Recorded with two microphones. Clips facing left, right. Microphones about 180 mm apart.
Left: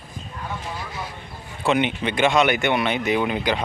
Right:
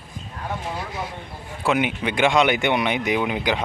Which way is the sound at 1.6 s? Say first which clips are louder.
Left 1 dB; 10° right (ahead or behind).